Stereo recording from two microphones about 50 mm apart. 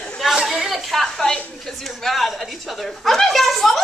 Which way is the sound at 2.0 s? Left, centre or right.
Centre.